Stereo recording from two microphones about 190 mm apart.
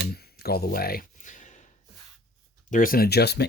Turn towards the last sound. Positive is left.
turn(degrees=60)  # may be behind; listen again after turning